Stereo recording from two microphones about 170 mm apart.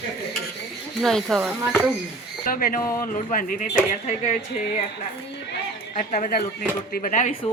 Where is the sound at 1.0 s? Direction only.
Centre (ahead or behind).